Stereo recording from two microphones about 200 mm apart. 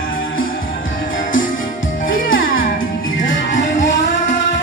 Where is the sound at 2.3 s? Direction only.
75° left (ahead or behind).